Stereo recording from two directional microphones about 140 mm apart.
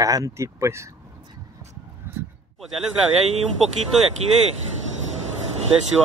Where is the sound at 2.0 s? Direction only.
15° right (ahead or behind).